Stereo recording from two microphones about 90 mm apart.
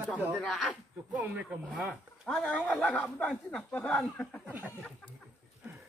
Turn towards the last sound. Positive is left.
turn(degrees=10)  # may be behind; listen again after turning